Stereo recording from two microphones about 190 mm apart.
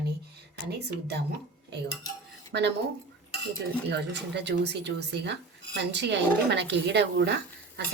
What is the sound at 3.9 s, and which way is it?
Speech, 65° right (ahead or behind).